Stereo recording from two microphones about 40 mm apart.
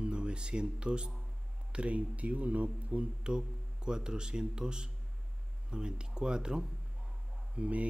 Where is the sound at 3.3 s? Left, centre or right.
Right.